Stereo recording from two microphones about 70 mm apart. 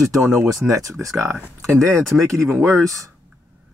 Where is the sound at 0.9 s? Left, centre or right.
Right.